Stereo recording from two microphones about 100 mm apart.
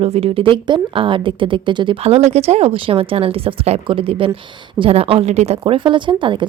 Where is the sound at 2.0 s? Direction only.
90° right; by 4.3 s 60° right (ahead or behind).